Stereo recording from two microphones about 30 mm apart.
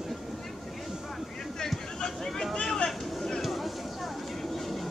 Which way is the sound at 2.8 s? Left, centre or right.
Left.